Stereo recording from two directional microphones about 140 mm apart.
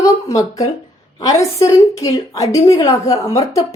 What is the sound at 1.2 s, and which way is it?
A woman's voice, 25° left (ahead or behind).